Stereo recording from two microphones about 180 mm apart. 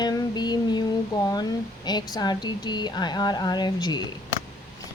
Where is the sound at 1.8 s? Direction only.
25° left (ahead or behind).